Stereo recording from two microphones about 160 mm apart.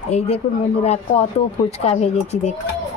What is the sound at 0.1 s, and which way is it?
Speech, 40° left (ahead or behind).